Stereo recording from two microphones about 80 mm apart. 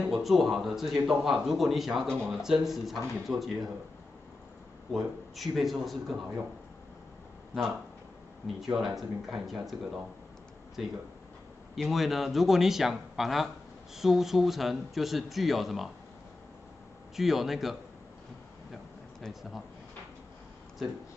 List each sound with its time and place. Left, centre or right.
0.1 s a man's voice: centre
4.9 s a man's voice: centre
8.5 s a man's voice: centre
10.8 s a man's voice: centre
17.1 s a man's voice: centre
20.8 s a man's voice: centre